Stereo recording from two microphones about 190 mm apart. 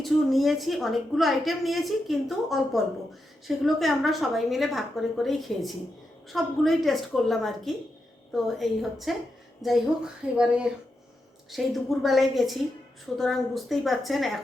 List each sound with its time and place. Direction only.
0.0 s a woman's voice: centre (ahead or behind)